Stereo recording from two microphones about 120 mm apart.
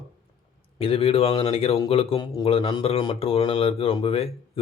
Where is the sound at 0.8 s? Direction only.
50° left (ahead or behind).